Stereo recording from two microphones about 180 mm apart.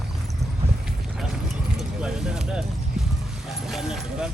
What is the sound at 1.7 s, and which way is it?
Speech, 5° right (ahead or behind).